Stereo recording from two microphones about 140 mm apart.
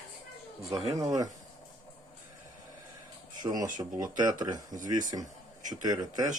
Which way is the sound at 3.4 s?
30° right (ahead or behind).